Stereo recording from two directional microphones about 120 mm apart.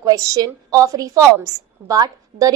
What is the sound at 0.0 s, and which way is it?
A woman's voice, 30° right (ahead or behind).